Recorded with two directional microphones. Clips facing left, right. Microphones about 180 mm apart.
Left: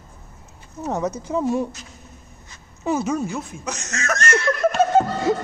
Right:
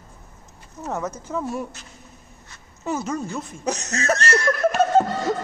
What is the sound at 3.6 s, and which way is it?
Speech, 35° right (ahead or behind).